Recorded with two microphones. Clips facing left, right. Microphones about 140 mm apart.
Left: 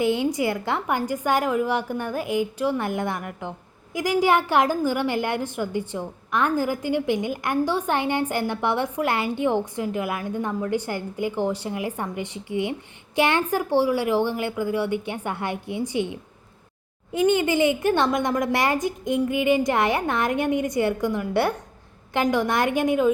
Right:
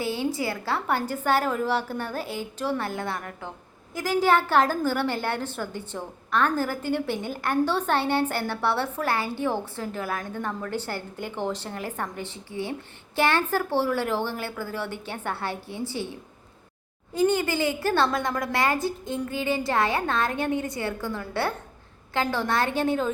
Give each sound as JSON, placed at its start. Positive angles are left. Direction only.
{"t": 0.0, "sound": "a woman's voice", "side_deg": 20}
{"t": 17.2, "sound": "a woman's voice", "side_deg": 20}